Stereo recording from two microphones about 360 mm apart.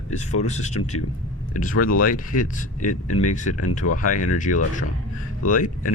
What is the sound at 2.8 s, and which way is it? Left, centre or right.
Speech, left.